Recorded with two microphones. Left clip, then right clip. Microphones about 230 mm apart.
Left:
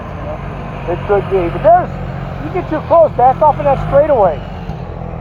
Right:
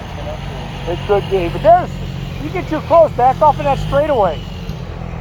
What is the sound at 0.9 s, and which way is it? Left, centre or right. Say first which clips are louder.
Speech: left 3 dB; right.